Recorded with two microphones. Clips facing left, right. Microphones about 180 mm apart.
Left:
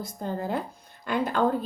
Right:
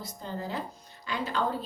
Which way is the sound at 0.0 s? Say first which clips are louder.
Left 5 dB; 50° left (ahead or behind).